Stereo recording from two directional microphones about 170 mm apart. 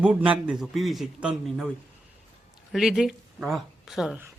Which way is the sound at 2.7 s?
Centre (ahead or behind).